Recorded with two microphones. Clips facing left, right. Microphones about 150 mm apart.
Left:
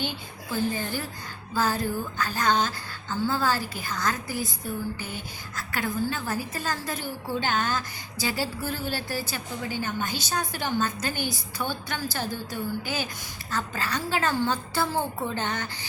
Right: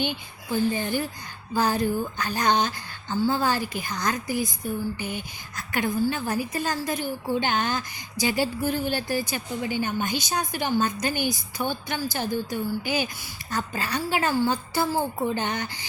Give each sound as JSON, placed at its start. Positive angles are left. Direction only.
{"t": 0.5, "sound": "a woman's voice", "side_deg": -15}